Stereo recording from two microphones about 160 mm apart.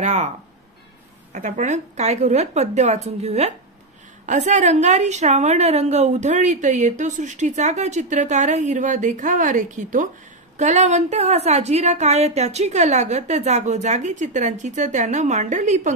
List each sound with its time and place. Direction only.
0.0 s a woman's voice: 50° right (ahead or behind)
1.3 s a woman's voice: 50° right (ahead or behind)